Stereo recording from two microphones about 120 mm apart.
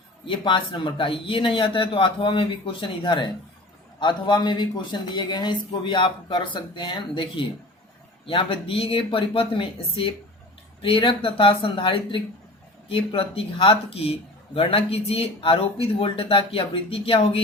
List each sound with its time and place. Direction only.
0.3 s speech: 45° left (ahead or behind)